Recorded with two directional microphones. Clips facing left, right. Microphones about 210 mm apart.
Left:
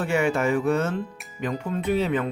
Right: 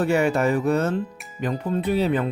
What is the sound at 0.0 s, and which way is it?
Speech, 40° right (ahead or behind).